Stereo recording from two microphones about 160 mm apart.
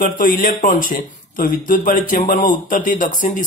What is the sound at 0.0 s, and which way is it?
A man's voice, 60° left (ahead or behind).